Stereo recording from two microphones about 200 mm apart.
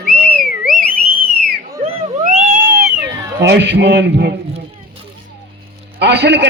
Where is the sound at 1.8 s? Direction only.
35° right (ahead or behind).